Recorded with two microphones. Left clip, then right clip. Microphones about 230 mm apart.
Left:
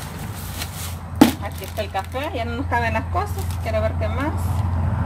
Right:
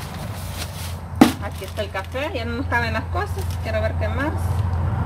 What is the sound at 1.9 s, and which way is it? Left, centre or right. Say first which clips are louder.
Speech: left 1 dB; centre.